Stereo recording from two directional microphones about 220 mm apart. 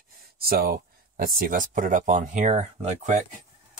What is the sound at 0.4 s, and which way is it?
Speech, 45° right (ahead or behind).